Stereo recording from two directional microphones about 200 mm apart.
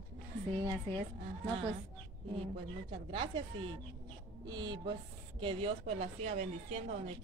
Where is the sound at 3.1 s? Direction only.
25° right (ahead or behind).